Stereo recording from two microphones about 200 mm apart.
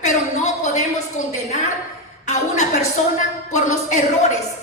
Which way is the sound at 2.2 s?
35° left (ahead or behind).